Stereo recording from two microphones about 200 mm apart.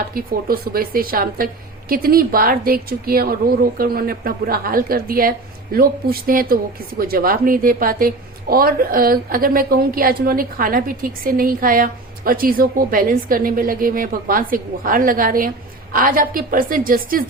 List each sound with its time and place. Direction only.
0.1 s a woman's voice: 45° right (ahead or behind)